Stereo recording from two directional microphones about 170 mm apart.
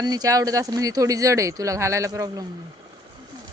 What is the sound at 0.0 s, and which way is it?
Speech, 20° right (ahead or behind).